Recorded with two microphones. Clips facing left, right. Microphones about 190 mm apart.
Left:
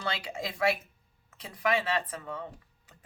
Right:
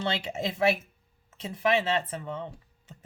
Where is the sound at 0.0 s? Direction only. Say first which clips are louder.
Right 5 dB; 25° right (ahead or behind).